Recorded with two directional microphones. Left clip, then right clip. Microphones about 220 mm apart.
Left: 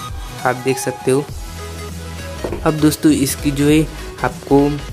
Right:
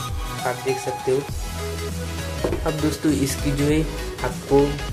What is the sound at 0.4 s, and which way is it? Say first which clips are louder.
Speech: left 8 dB; 45° left (ahead or behind).